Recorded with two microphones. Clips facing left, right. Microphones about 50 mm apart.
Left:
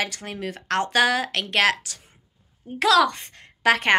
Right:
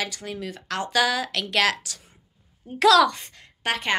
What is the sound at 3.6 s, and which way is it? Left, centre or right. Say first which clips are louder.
Speech: left 6 dB; left.